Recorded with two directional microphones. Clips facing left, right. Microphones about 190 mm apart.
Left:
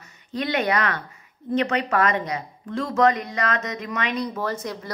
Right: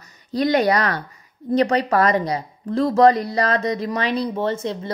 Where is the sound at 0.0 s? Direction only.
35° right (ahead or behind).